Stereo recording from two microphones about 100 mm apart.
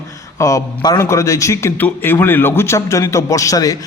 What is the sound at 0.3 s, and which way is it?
A man's voice, 30° left (ahead or behind).